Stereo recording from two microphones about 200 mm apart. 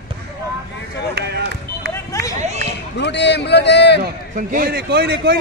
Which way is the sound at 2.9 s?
60° left (ahead or behind).